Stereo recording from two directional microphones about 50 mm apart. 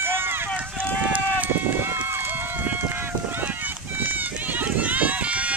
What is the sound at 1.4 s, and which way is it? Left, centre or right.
Run, right.